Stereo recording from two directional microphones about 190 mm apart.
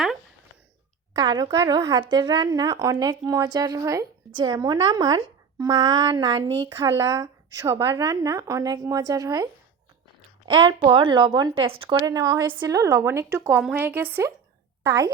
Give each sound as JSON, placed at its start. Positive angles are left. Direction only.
{"t": 1.1, "sound": "a woman's voice", "side_deg": -20}